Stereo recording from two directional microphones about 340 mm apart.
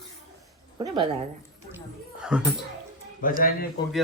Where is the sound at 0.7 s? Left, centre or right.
Centre.